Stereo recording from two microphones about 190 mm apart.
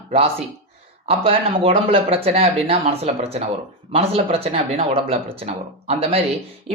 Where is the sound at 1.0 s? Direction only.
30° right (ahead or behind).